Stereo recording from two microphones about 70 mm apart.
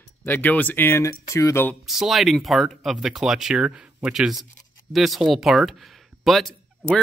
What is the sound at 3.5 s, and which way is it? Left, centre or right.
Speech, centre.